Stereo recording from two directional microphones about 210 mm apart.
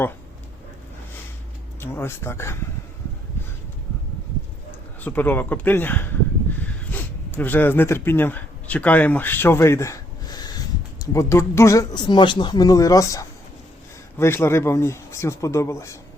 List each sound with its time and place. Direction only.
1.8 s speech: 10° left (ahead or behind)
4.9 s speech: 10° left (ahead or behind)